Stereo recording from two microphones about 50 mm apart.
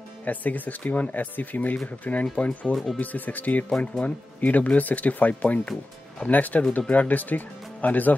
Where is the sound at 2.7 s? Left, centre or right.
Centre.